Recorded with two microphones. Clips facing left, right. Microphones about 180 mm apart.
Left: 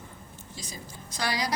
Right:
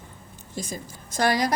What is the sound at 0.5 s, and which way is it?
A woman's voice, 50° right (ahead or behind).